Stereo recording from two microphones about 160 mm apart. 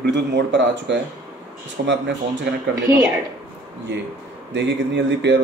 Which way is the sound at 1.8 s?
90° right.